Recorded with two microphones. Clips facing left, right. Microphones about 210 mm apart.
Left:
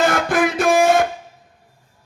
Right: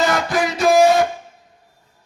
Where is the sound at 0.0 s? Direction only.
55° left (ahead or behind).